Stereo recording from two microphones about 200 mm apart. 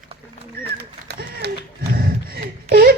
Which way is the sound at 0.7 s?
50° right (ahead or behind).